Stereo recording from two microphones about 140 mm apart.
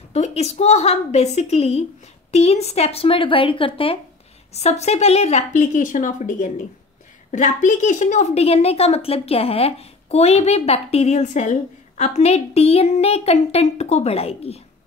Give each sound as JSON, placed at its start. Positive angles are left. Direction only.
{"t": 0.1, "sound": "a woman's voice", "side_deg": 50}
{"t": 4.6, "sound": "a woman's voice", "side_deg": 50}